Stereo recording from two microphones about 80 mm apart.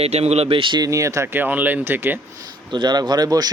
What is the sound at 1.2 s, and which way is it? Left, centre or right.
Speech, right.